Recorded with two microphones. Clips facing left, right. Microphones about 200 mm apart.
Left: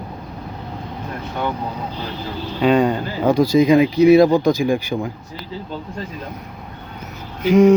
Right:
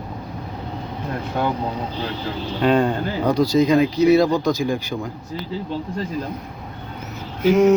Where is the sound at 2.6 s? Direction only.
5° left (ahead or behind).